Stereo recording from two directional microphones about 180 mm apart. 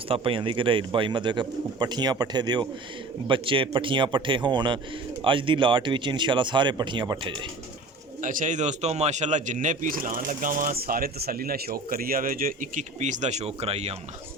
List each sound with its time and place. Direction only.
0.1 s speech: 30° right (ahead or behind)
8.2 s speech: 45° right (ahead or behind)